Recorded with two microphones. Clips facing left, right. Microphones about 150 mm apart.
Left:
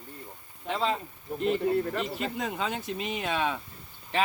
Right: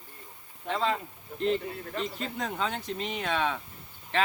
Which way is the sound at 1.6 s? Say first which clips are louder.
Left 11 dB; 55° left (ahead or behind).